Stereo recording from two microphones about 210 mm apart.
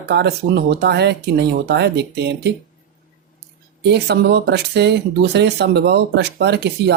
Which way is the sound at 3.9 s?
55° right (ahead or behind).